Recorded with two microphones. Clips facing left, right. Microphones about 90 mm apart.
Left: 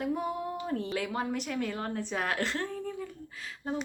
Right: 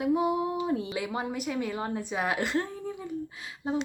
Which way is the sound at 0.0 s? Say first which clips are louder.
Right 6 dB; 5° right (ahead or behind).